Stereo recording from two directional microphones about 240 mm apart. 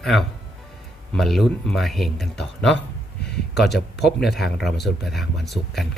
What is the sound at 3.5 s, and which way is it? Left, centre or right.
Speech, left.